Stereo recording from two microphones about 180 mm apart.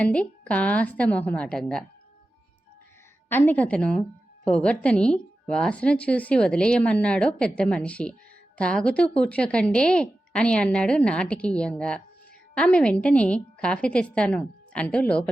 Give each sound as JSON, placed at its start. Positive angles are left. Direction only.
{"t": 0.0, "sound": "a woman's voice", "side_deg": 5}
{"t": 3.2, "sound": "a woman's voice", "side_deg": 10}